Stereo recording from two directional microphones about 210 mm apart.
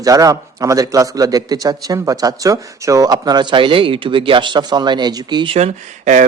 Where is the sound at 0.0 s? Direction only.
15° right (ahead or behind).